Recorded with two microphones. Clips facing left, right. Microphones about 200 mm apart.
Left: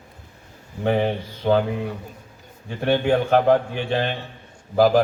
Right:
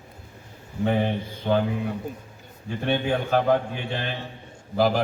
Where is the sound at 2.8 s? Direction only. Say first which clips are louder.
Left 5 dB; 60° left (ahead or behind).